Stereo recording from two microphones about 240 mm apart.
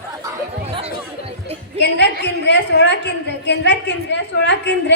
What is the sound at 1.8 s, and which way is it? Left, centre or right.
A woman's voice, left.